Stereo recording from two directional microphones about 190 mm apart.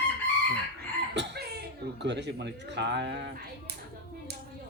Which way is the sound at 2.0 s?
65° right (ahead or behind).